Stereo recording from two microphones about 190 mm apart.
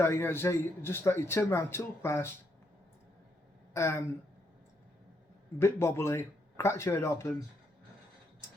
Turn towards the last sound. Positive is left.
turn(degrees=15)  # may be behind; listen again after turning